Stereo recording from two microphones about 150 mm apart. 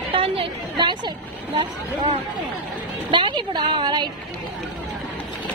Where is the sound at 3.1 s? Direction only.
30° right (ahead or behind).